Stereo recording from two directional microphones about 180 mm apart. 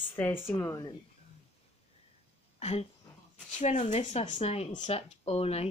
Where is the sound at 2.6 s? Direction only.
35° left (ahead or behind).